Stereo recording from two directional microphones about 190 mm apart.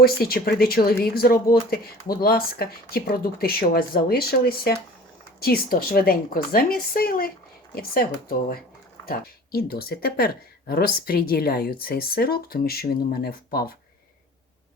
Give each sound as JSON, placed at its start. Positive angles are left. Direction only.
{"t": 0.0, "sound": "speech", "side_deg": 55}